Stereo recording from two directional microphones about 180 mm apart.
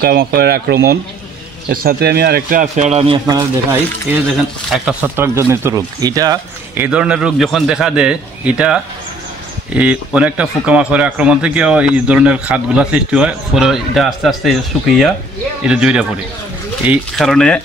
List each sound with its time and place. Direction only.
0.0 s speech: 55° right (ahead or behind)
2.6 s a man's voice: 40° right (ahead or behind)
3.7 s speech: 5° right (ahead or behind)
6.9 s a man's voice: 5° right (ahead or behind)
17.3 s a man's voice: 5° left (ahead or behind)